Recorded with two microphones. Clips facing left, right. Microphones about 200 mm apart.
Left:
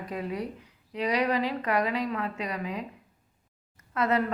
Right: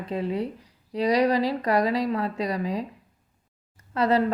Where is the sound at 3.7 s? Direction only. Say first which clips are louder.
Right 4 dB; 30° right (ahead or behind).